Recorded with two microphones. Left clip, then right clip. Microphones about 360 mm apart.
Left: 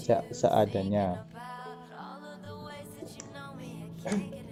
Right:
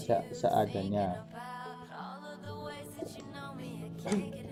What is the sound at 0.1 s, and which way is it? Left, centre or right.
Speech, left.